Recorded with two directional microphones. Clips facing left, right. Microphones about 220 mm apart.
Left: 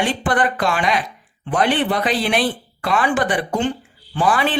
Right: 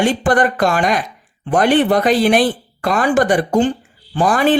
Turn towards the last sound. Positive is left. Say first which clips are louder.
# right 5 dB
turn(degrees=-45)  # may be behind; listen again after turning